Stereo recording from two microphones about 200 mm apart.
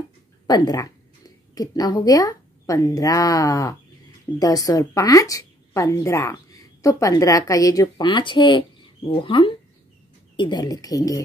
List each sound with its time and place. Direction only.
0.5 s a woman's voice: 20° left (ahead or behind)